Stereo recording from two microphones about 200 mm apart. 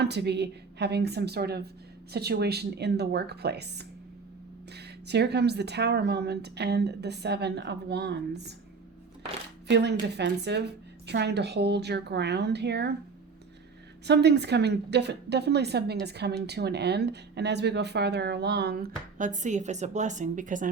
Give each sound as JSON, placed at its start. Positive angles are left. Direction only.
{"t": 0.0, "sound": "a woman's voice", "side_deg": -55}
{"t": 9.6, "sound": "a woman's voice", "side_deg": -60}
{"t": 14.1, "sound": "a woman's voice", "side_deg": -55}